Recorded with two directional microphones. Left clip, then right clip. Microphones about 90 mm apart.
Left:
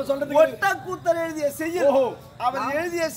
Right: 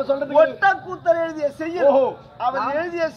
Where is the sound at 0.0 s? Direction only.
30° right (ahead or behind).